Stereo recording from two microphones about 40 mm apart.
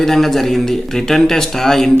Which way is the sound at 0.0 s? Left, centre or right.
Centre.